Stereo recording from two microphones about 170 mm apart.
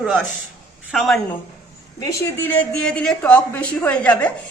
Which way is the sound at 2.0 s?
15° left (ahead or behind).